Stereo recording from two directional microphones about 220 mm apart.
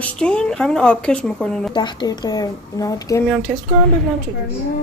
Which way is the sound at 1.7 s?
20° left (ahead or behind).